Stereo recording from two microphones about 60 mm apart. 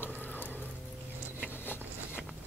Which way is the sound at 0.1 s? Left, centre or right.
Left.